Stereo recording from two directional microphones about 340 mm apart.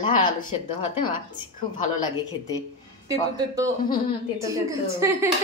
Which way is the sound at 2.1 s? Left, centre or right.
Centre.